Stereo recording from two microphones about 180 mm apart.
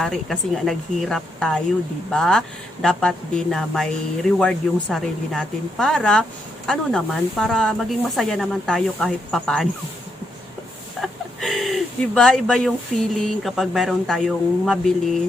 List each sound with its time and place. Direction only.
0.0 s speech: centre (ahead or behind)
11.0 s speech: centre (ahead or behind)